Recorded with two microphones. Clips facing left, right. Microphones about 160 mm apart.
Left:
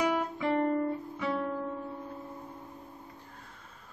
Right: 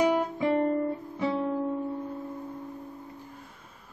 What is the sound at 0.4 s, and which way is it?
Music, 20° right (ahead or behind).